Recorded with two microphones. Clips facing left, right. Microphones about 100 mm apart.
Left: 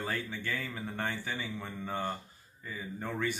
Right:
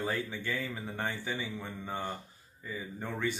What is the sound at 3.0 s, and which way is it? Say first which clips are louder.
Speech: even; 15° right (ahead or behind).